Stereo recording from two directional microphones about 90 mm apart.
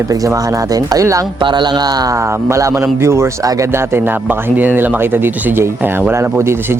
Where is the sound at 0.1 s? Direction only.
40° right (ahead or behind).